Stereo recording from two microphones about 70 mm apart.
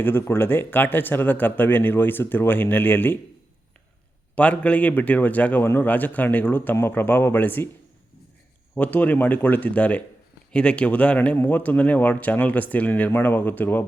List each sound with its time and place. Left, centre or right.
0.0 s speech: left
4.4 s speech: centre
8.7 s speech: left